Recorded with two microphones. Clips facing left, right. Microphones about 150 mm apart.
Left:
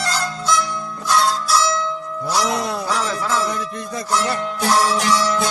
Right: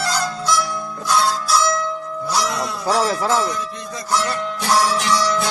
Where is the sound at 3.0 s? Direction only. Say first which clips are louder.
Right 3 dB; 30° right (ahead or behind).